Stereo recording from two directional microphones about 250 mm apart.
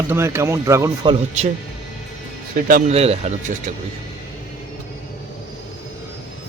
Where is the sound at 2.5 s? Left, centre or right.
Right.